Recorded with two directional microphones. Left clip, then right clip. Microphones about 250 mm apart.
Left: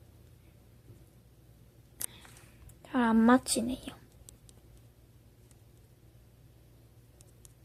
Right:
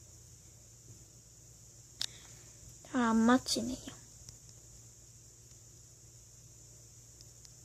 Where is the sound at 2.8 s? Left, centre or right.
Centre.